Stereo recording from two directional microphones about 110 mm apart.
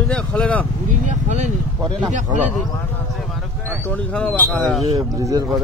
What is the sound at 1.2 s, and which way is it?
Speech, 90° right.